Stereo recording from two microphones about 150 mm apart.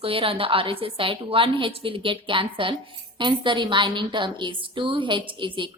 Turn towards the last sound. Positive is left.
turn(degrees=-35)  # may be behind; listen again after turning